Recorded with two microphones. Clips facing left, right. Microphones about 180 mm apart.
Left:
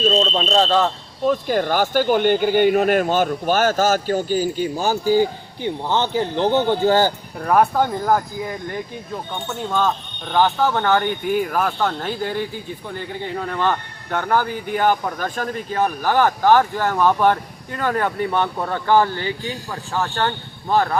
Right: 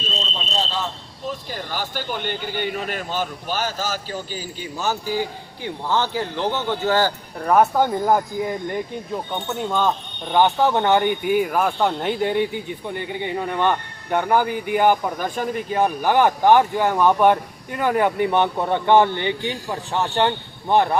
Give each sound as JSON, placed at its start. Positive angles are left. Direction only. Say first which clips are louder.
{"t": 0.1, "sound": "a man's voice", "louder": "left 11 dB", "side_deg": 65}
{"t": 7.4, "sound": "speech", "louder": "even", "side_deg": -5}
{"t": 10.3, "sound": "speech", "louder": "right 1 dB", "side_deg": -20}
{"t": 11.3, "sound": "speech", "louder": "even", "side_deg": -5}
{"t": 11.8, "sound": "speech", "louder": "right 2 dB", "side_deg": -15}